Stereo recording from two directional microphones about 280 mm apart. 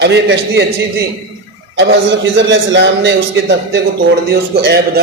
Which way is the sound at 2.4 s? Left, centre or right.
Right.